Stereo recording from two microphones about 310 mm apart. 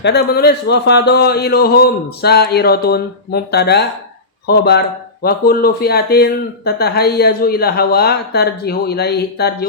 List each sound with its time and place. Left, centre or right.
0.0 s speech: left